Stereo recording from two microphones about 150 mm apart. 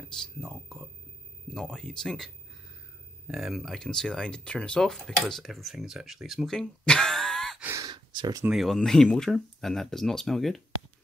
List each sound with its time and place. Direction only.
0.2 s speech: 5° left (ahead or behind)
7.6 s a sound: 20° right (ahead or behind)
8.5 s speech: centre (ahead or behind)